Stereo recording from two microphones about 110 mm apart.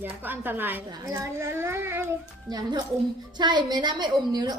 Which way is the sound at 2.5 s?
35° right (ahead or behind).